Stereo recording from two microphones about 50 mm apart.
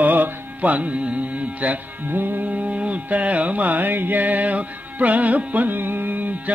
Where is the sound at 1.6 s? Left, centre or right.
Right.